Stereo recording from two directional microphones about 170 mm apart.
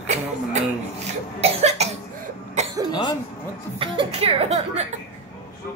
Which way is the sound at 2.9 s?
25° left (ahead or behind).